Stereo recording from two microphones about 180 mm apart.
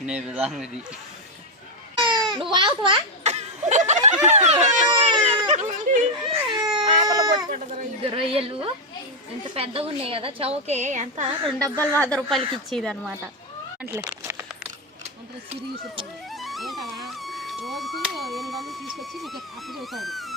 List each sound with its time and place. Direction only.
0.0 s a woman's voice: 5° right (ahead or behind)
2.0 s baby cry: 25° right (ahead or behind)
2.3 s a sound: 25° right (ahead or behind)
4.6 s a woman's voice: 40° right (ahead or behind)
4.9 s baby cry: 25° right (ahead or behind)
5.2 s a sound: 30° right (ahead or behind)
5.5 s a sound: 40° right (ahead or behind)
6.5 s baby cry: 25° right (ahead or behind)
8.0 s a woman's voice: 30° right (ahead or behind)
11.7 s a woman's voice: 20° right (ahead or behind)
11.9 s a woman's voice: 5° left (ahead or behind)
13.8 s cat: 15° right (ahead or behind)
16.3 s music: centre (ahead or behind)